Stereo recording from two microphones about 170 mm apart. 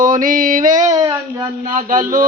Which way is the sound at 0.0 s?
50° right (ahead or behind).